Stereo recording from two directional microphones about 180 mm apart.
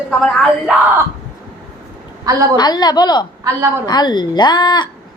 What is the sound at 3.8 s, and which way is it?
Speech, 25° left (ahead or behind).